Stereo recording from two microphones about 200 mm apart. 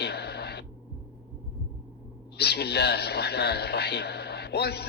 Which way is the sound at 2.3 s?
55° left (ahead or behind).